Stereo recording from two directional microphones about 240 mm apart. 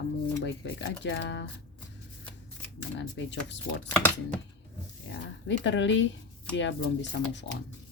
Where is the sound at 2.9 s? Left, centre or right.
Left.